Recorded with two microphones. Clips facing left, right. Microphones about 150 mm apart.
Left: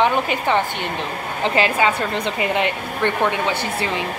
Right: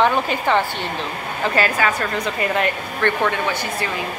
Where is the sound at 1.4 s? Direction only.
20° left (ahead or behind).